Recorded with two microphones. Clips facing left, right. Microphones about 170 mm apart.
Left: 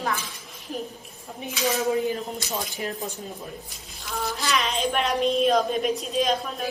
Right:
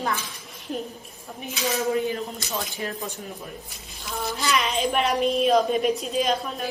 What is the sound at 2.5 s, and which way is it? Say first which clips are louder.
Speech: right 1 dB; 20° left (ahead or behind).